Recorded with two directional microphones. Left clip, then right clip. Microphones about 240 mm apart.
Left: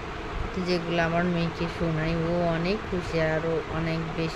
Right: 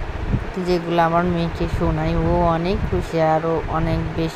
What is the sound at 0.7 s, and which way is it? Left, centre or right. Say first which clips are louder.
Speech: right 8 dB; centre.